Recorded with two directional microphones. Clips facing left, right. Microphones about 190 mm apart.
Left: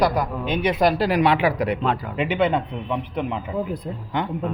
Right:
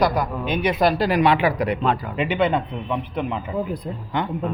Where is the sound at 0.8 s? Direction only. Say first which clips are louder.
Right 1 dB; 10° left (ahead or behind).